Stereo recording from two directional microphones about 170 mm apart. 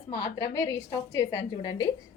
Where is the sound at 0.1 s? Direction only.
20° left (ahead or behind).